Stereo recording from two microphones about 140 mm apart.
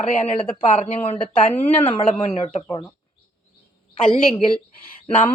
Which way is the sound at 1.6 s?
45° left (ahead or behind).